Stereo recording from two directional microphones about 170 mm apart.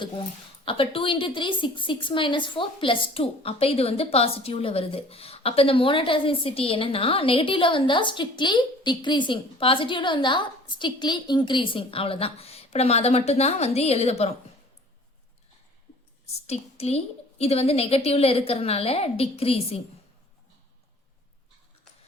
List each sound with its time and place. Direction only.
0.6 s a woman's voice: 30° left (ahead or behind)
16.5 s a woman's voice: 40° left (ahead or behind)